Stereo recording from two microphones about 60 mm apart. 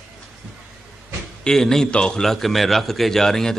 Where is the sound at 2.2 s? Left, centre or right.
Centre.